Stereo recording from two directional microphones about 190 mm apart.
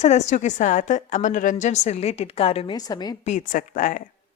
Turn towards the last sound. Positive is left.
turn(degrees=45)  # may be behind; listen again after turning